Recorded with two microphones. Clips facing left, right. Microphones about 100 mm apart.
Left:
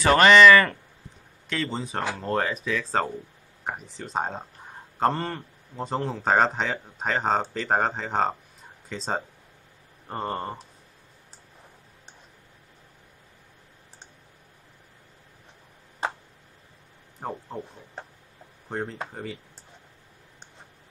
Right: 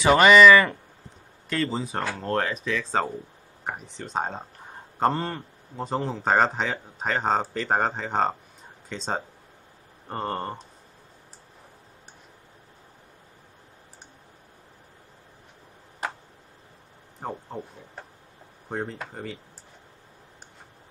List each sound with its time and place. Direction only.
0.0 s a man's voice: 10° right (ahead or behind)
16.0 s tick-tock: 25° left (ahead or behind)
17.2 s speech: centre (ahead or behind)
18.7 s speech: centre (ahead or behind)